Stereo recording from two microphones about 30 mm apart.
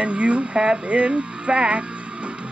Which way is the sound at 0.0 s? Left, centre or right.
Right.